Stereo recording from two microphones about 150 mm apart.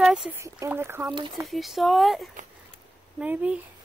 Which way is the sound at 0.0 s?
5° right (ahead or behind).